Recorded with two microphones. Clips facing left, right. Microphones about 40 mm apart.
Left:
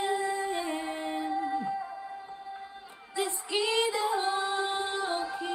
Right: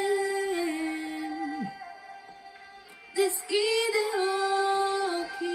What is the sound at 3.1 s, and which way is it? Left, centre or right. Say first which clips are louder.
Female singing: right 4 dB; left.